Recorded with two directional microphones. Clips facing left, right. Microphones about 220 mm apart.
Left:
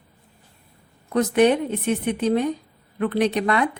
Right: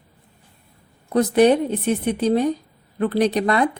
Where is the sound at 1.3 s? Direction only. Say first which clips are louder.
Right 2 dB; 35° right (ahead or behind).